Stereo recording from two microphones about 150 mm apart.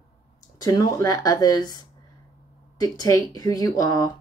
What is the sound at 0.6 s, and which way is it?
A woman's voice, 25° left (ahead or behind).